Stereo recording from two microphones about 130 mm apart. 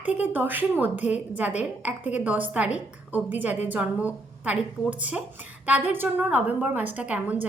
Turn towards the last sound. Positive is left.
turn(degrees=-10)  # may be behind; listen again after turning